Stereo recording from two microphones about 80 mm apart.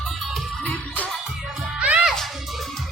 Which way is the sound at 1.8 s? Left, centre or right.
Centre.